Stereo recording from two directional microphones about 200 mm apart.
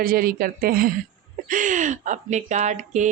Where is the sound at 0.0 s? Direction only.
45° right (ahead or behind).